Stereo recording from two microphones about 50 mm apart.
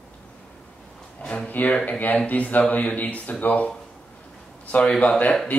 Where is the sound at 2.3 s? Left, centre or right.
Left.